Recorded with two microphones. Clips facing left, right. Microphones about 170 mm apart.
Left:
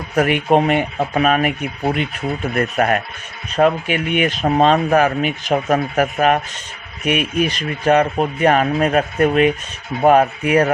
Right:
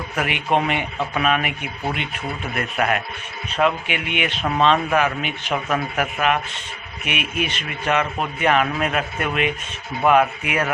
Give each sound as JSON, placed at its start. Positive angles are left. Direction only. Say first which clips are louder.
{"t": 0.2, "sound": "speech", "louder": "left 7 dB", "side_deg": 45}